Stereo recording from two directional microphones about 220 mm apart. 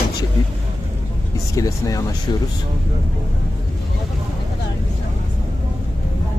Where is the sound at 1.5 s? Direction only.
15° left (ahead or behind).